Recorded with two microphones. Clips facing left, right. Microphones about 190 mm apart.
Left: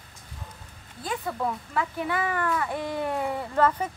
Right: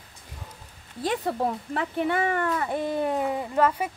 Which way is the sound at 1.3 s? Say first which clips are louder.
Right 3 dB; 35° right (ahead or behind).